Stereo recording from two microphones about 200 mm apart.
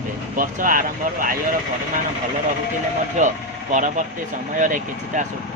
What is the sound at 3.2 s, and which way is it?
Speech, 40° right (ahead or behind).